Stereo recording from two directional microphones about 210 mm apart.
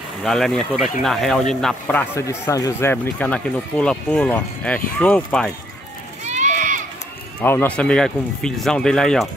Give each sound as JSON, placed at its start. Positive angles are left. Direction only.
{"t": 0.2, "sound": "speech", "side_deg": 0}
{"t": 6.2, "sound": "a sound", "side_deg": -35}
{"t": 7.4, "sound": "speech", "side_deg": 5}